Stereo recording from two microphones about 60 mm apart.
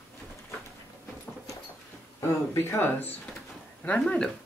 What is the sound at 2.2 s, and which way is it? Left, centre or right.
Speech, left.